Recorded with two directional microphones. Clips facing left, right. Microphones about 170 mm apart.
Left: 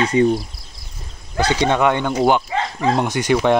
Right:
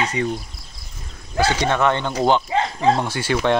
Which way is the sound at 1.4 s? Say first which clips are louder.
Left 2 dB; 15° left (ahead or behind).